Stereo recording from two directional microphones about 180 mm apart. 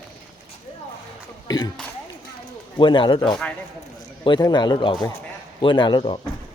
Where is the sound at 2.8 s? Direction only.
25° left (ahead or behind).